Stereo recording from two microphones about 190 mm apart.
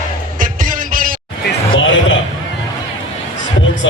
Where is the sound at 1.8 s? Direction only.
80° left.